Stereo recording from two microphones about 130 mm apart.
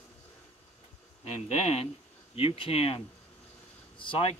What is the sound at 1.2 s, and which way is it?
Speech, 55° left (ahead or behind).